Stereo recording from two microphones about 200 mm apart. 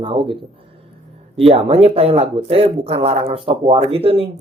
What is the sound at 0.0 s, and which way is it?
Speech, 25° right (ahead or behind).